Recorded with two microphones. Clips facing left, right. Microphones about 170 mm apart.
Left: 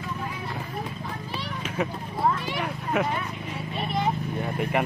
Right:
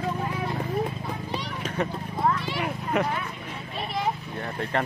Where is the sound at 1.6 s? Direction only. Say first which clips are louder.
Left 1 dB; 5° left (ahead or behind).